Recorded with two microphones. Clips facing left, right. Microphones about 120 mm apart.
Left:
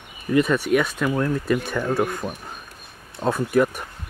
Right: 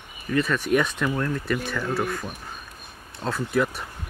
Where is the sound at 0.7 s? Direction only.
5° left (ahead or behind).